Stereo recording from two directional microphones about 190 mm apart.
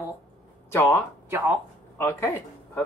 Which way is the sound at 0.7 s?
10° left (ahead or behind).